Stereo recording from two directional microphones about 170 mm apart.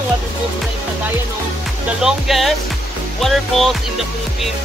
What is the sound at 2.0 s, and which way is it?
Speech, centre (ahead or behind).